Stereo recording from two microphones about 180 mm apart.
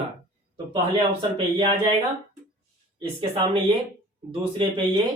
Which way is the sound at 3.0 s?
30° right (ahead or behind).